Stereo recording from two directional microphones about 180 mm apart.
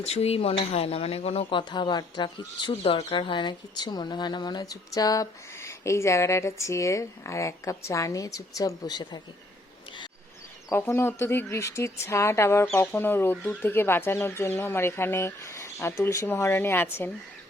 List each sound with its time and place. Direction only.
0.0 s speech: 35° left (ahead or behind)
10.7 s speech: 15° left (ahead or behind)